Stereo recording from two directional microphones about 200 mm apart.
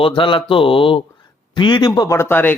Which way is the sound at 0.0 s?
25° left (ahead or behind).